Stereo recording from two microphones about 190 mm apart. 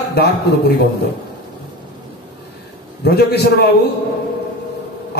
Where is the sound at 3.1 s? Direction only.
60° left (ahead or behind).